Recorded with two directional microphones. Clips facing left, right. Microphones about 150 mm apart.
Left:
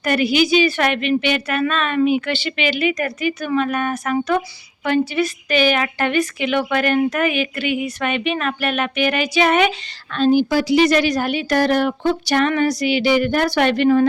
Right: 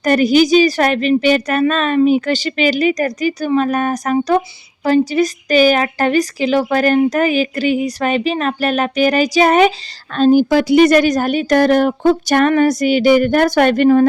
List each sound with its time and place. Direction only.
0.0 s a woman's voice: 40° right (ahead or behind)